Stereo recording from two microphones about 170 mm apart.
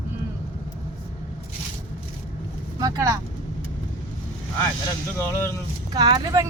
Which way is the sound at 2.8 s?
20° right (ahead or behind).